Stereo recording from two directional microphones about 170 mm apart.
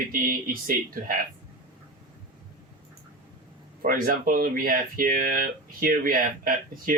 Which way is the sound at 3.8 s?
55° right (ahead or behind).